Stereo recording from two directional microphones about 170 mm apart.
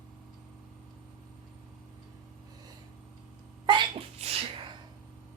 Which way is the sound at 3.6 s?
30° right (ahead or behind).